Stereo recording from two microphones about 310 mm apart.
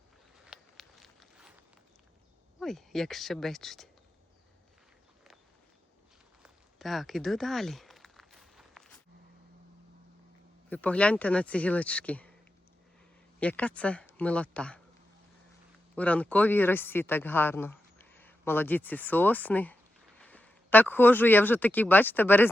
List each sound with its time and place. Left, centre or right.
0.4 s walk: centre
2.6 s speech: centre
6.4 s a sound: centre
10.7 s speech: centre
13.4 s speech: centre
16.0 s speech: centre